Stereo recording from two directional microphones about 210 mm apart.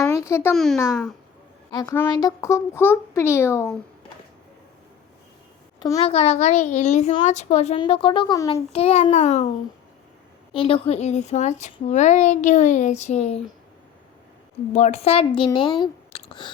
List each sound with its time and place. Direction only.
0.1 s a sound: 15° left (ahead or behind)
0.5 s speech: centre (ahead or behind)
1.7 s speech: 15° left (ahead or behind)
5.8 s a child's voice: 25° left (ahead or behind)
8.7 s a woman's voice: 30° left (ahead or behind)
10.5 s a woman's voice: 25° left (ahead or behind)
14.7 s a child's voice: 30° left (ahead or behind)